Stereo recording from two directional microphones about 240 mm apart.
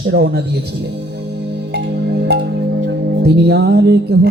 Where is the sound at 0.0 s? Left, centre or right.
Right.